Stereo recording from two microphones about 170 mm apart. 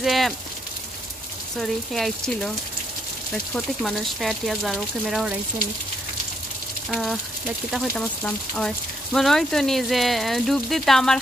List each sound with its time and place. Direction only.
0.0 s a sound: centre (ahead or behind)
1.6 s speech: centre (ahead or behind)
3.5 s speech: centre (ahead or behind)
6.9 s speech: centre (ahead or behind)